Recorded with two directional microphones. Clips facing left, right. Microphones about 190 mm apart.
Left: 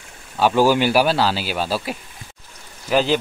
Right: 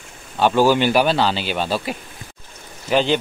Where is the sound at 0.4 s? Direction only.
5° left (ahead or behind).